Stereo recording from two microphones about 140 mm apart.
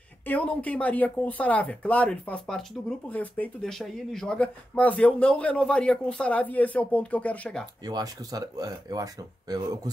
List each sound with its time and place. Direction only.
0.3 s speech: 10° left (ahead or behind)
7.8 s speech: 25° right (ahead or behind)